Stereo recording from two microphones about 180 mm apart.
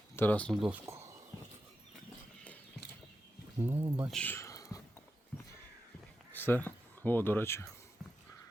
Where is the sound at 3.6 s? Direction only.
10° right (ahead or behind).